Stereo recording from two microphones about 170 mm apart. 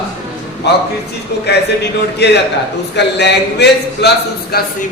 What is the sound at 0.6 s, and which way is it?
Speech, 80° left.